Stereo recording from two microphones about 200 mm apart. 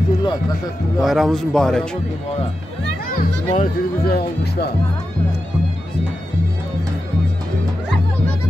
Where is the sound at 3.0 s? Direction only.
45° left (ahead or behind).